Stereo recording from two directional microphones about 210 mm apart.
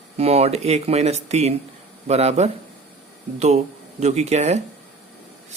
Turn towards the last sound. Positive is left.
turn(degrees=-30)  # may be behind; listen again after turning